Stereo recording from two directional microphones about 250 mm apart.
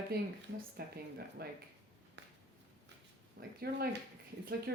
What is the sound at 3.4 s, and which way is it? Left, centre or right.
Speech, right.